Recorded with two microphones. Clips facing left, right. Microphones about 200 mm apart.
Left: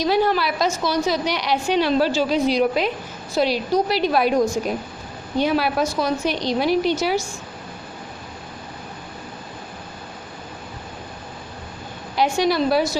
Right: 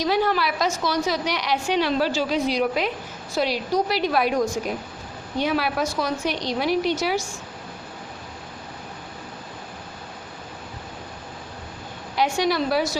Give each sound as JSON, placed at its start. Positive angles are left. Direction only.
{"t": 0.0, "sound": "a woman's voice", "side_deg": 30}
{"t": 12.1, "sound": "a woman's voice", "side_deg": 30}